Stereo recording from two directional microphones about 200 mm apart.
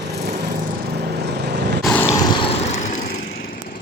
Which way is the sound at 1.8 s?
10° left (ahead or behind).